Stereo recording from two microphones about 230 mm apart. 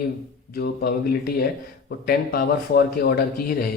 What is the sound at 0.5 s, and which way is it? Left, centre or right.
Speech, left.